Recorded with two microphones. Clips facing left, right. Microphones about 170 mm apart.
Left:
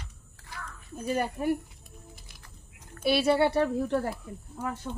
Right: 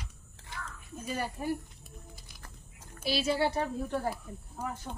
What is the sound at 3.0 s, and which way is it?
A woman's voice, 60° left (ahead or behind).